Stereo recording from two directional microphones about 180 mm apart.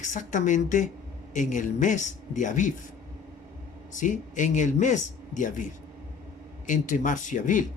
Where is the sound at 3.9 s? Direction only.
45° left (ahead or behind).